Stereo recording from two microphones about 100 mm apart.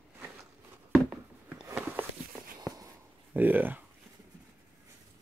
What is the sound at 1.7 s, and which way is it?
Walk, 20° right (ahead or behind).